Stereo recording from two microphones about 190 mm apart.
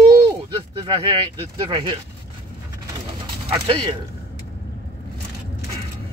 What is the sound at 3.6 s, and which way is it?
Speech, 25° right (ahead or behind).